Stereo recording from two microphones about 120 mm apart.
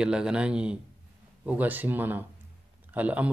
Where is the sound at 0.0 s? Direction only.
5° right (ahead or behind).